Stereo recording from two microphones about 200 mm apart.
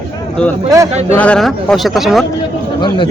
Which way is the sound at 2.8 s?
25° left (ahead or behind).